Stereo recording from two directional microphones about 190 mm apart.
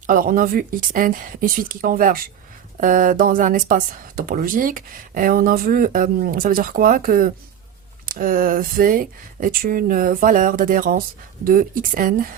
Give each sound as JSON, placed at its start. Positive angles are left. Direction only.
{"t": 0.1, "sound": "speech", "side_deg": -45}